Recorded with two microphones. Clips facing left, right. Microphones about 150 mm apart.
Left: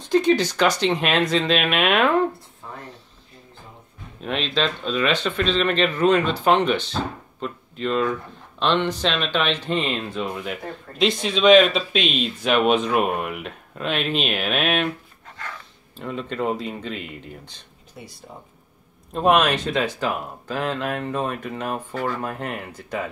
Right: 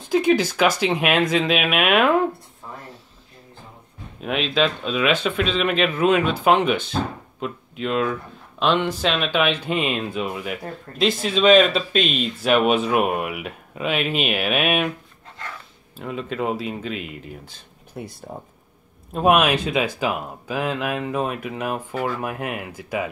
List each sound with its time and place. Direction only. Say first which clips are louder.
0.0 s speech: even; 10° right (ahead or behind)
2.6 s a sound: even; 10° right (ahead or behind)
4.2 s speech: right 3 dB; 5° right (ahead or behind)
16.0 s speech: even; 5° right (ahead or behind)
17.9 s speech: right 7 dB; 55° right (ahead or behind)
19.1 s speech: right 1 dB; 5° right (ahead or behind)